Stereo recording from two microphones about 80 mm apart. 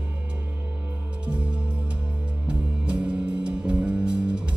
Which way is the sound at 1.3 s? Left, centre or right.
Centre.